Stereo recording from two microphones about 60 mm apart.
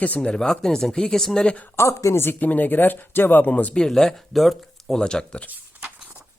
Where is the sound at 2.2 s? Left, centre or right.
Left.